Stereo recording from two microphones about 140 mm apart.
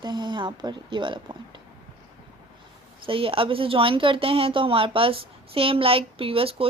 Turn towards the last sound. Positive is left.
turn(degrees=-40)  # may be behind; listen again after turning